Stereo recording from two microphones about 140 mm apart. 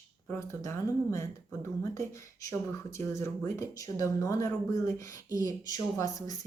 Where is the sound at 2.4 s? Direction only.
20° left (ahead or behind).